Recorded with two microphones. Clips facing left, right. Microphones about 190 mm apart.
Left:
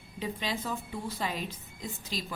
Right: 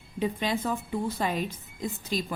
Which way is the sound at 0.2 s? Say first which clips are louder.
Right 6 dB; 50° right (ahead or behind).